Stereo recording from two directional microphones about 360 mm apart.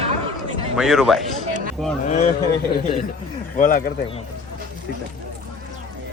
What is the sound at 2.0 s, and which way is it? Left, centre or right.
Speech, centre.